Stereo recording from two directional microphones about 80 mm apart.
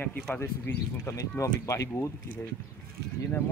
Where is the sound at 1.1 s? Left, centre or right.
Left.